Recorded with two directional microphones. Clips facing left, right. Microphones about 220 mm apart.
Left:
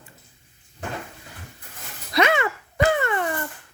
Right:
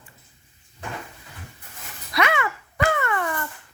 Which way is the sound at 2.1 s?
25° left (ahead or behind).